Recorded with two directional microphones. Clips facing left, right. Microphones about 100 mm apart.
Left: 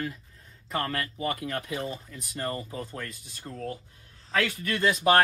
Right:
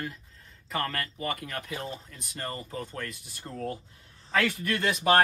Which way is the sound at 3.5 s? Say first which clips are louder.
Right 1 dB; 30° right (ahead or behind).